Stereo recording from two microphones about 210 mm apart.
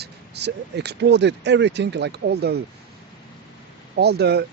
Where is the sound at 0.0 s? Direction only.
55° right (ahead or behind).